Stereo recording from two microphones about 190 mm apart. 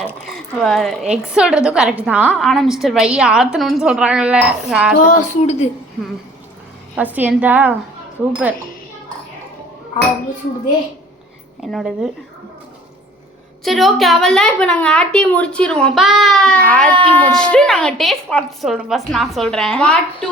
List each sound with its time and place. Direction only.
0.3 s a woman's voice: centre (ahead or behind)
5.1 s a woman's voice: 35° left (ahead or behind)
6.9 s a woman's voice: 10° right (ahead or behind)
11.6 s a woman's voice: centre (ahead or behind)
13.7 s a woman's voice: centre (ahead or behind)